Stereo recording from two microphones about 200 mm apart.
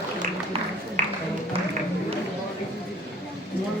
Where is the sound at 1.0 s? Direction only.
40° right (ahead or behind).